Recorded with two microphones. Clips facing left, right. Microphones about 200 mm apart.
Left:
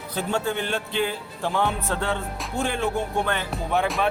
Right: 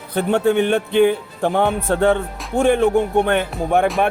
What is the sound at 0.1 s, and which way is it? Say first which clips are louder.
Speech: right 9 dB; 60° right (ahead or behind).